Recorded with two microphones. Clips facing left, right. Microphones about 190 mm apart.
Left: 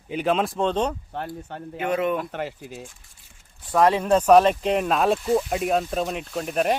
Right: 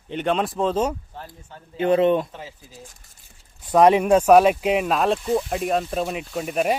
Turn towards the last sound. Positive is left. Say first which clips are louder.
# right 1 dB
turn(degrees=-5)  # may be behind; listen again after turning